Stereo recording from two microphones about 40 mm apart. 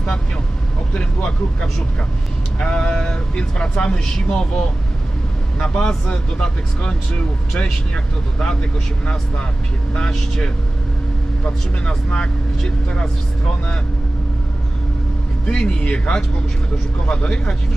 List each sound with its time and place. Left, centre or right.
0.9 s speech: left
9.9 s speech: left
15.4 s speech: left